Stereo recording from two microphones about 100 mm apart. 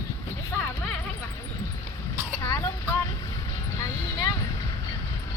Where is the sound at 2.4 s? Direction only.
30° left (ahead or behind).